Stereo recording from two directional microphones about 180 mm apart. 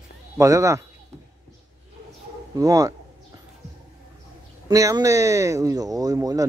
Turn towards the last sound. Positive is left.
turn(degrees=-20)  # may be behind; listen again after turning